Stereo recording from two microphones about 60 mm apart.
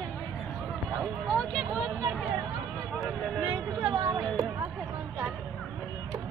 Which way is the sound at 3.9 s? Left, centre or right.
Right.